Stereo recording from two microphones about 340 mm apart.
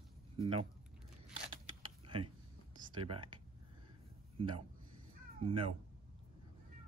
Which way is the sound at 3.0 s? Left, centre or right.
Centre.